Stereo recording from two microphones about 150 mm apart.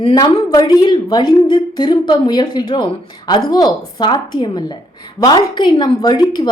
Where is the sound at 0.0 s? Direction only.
25° left (ahead or behind).